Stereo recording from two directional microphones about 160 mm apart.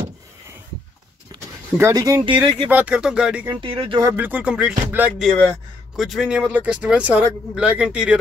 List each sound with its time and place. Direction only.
1.3 s a sound: 20° right (ahead or behind)
2.3 s speech: 10° right (ahead or behind)
3.6 s speech: 35° right (ahead or behind)
4.0 s speech: 10° right (ahead or behind)